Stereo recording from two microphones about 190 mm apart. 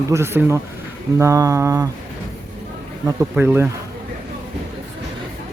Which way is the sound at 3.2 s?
10° right (ahead or behind).